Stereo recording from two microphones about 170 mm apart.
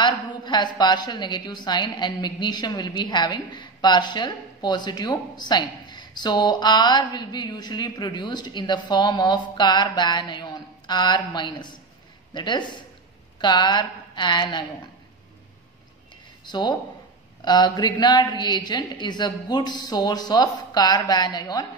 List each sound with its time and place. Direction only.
0.5 s a woman's voice: 25° left (ahead or behind)
16.4 s a woman's voice: 25° left (ahead or behind)